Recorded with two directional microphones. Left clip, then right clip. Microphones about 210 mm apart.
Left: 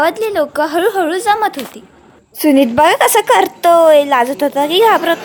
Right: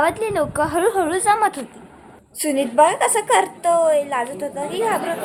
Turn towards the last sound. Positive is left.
turn(degrees=45)  # may be behind; listen again after turning